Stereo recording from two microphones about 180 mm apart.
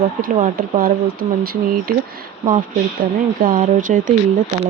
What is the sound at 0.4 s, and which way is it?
Speech, 50° right (ahead or behind).